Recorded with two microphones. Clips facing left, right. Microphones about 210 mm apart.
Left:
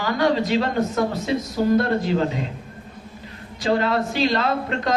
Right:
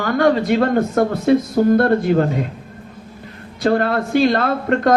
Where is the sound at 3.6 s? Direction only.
55° right (ahead or behind).